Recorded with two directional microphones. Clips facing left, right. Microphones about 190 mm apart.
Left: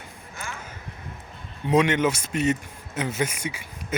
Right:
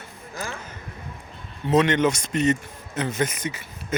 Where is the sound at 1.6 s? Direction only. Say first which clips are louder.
Right 1 dB; 10° left (ahead or behind).